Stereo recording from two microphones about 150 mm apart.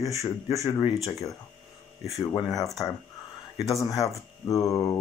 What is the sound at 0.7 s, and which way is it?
Speech, 30° left (ahead or behind).